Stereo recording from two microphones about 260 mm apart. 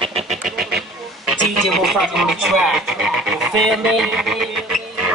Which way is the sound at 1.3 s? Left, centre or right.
Right.